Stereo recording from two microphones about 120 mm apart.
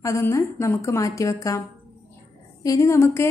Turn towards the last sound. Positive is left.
turn(degrees=25)  # may be behind; listen again after turning